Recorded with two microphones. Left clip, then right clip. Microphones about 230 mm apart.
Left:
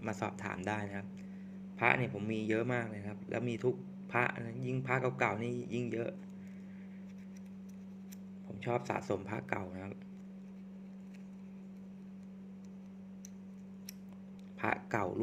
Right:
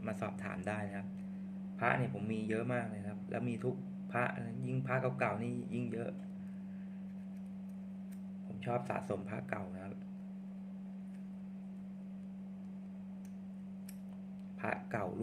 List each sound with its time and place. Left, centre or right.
0.0 s a man's voice: left
8.6 s a man's voice: left
14.6 s speech: left